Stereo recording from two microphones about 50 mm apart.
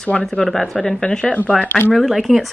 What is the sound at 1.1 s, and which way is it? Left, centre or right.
Speech, centre.